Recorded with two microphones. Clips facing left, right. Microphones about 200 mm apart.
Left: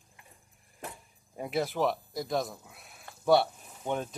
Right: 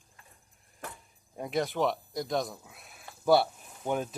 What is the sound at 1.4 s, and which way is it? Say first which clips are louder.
Speech: even; 5° left (ahead or behind).